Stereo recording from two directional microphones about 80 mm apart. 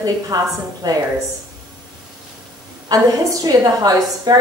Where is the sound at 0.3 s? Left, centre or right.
Right.